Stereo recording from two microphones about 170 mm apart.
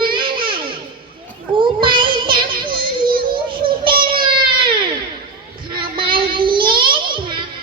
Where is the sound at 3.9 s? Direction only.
60° right (ahead or behind).